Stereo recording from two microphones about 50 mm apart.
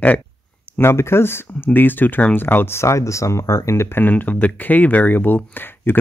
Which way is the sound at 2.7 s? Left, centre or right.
Left.